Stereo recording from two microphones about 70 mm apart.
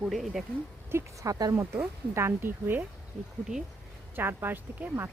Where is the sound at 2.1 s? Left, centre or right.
Right.